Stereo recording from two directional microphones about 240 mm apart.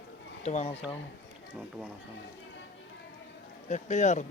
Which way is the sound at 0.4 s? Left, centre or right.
Left.